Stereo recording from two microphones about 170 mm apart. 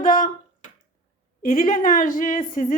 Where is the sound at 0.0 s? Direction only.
50° left (ahead or behind).